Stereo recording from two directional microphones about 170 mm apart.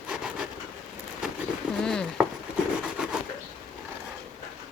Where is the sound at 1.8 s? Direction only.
5° left (ahead or behind).